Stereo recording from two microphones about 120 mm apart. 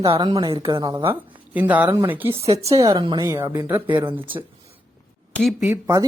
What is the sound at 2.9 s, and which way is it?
Speech, 40° right (ahead or behind).